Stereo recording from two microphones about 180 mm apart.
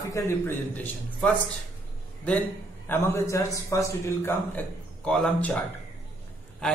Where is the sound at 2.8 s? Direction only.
15° left (ahead or behind).